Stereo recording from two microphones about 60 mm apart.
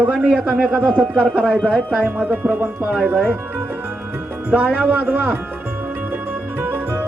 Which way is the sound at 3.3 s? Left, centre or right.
Right.